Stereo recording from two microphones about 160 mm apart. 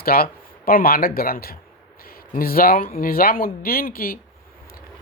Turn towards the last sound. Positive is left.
turn(degrees=65)  # may be behind; listen again after turning